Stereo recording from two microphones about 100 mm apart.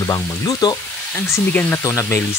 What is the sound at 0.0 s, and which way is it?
Speech, 30° left (ahead or behind).